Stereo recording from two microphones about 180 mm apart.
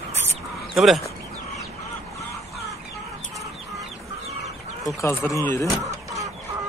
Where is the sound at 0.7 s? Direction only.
Centre (ahead or behind).